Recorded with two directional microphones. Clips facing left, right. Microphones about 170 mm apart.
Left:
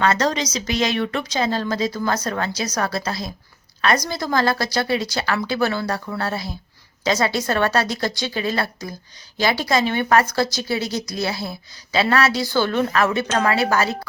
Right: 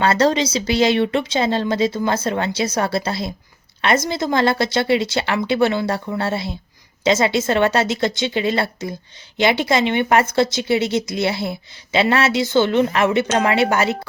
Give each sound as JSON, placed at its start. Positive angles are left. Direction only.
{"t": 0.0, "sound": "a woman's voice", "side_deg": -30}